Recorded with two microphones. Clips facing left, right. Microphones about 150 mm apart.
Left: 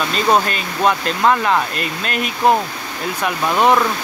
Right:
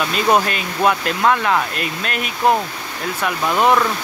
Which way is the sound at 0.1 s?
5° right (ahead or behind).